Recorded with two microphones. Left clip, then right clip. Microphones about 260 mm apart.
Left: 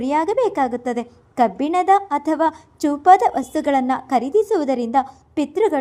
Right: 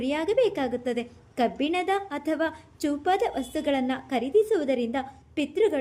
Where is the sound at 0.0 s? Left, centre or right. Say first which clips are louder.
Left 6 dB; centre.